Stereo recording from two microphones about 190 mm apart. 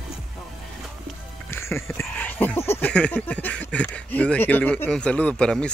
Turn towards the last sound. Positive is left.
turn(degrees=5)  # may be behind; listen again after turning